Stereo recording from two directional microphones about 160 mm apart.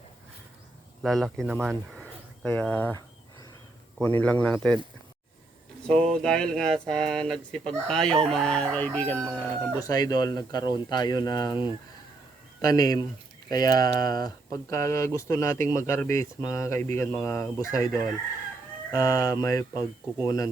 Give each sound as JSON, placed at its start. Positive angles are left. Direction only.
{"t": 1.0, "sound": "speech", "side_deg": 0}
{"t": 4.0, "sound": "speech", "side_deg": 10}
{"t": 5.8, "sound": "speech", "side_deg": 5}
{"t": 9.3, "sound": "speech", "side_deg": -10}
{"t": 9.8, "sound": "speech", "side_deg": 25}